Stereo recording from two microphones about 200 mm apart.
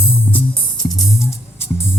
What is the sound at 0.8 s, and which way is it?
Music, centre (ahead or behind).